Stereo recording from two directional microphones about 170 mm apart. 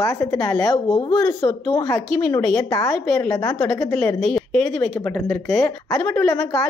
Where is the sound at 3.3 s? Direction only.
20° left (ahead or behind).